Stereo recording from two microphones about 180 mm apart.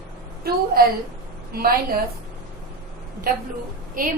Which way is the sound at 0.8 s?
55° right (ahead or behind).